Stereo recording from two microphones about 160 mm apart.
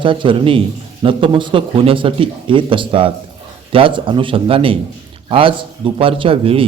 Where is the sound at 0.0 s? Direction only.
30° right (ahead or behind).